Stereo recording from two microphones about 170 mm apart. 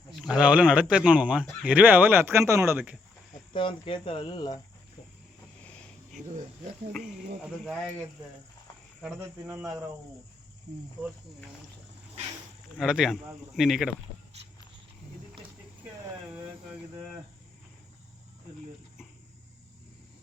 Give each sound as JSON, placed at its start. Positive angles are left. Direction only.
{"t": 0.1, "sound": "a sound", "side_deg": 0}
{"t": 0.3, "sound": "speech", "side_deg": -10}
{"t": 3.5, "sound": "speech", "side_deg": 30}
{"t": 5.6, "sound": "insect", "side_deg": 5}
{"t": 6.9, "sound": "speech", "side_deg": 0}
{"t": 9.0, "sound": "speech", "side_deg": 0}
{"t": 12.8, "sound": "speech", "side_deg": 0}